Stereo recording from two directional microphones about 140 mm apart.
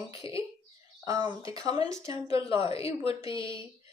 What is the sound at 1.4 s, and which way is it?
Speech, 25° right (ahead or behind).